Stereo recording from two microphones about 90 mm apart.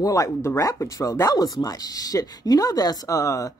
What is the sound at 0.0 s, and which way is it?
Speech, 40° left (ahead or behind).